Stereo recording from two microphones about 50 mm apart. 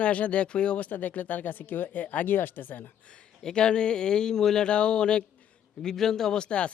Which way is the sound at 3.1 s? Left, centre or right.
Centre.